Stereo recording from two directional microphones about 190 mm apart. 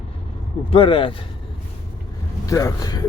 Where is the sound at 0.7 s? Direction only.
25° left (ahead or behind).